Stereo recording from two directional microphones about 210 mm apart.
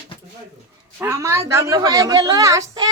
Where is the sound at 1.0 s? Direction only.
15° right (ahead or behind).